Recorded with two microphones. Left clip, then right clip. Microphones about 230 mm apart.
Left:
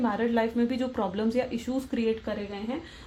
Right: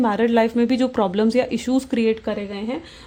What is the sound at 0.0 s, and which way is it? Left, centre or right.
Speech, right.